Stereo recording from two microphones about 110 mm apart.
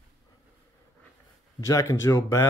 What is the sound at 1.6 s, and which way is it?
Speech, 30° left (ahead or behind).